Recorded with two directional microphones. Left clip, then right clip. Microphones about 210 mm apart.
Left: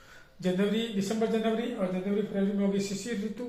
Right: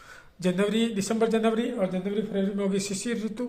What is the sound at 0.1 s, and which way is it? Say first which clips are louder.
A man's voice: right 3 dB; 40° right (ahead or behind).